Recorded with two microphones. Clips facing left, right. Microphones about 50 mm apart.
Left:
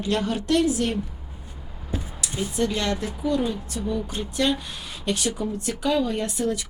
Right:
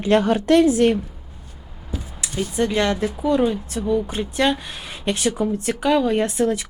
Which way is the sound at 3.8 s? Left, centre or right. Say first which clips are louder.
Right 7 dB; centre.